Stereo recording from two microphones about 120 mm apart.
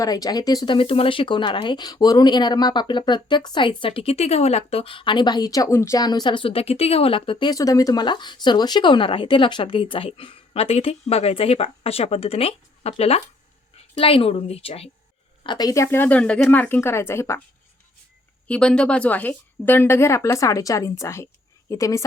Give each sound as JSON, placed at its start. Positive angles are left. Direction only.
{"t": 0.0, "sound": "a woman's voice", "side_deg": 30}
{"t": 15.4, "sound": "speech", "side_deg": 35}
{"t": 18.4, "sound": "speech", "side_deg": 10}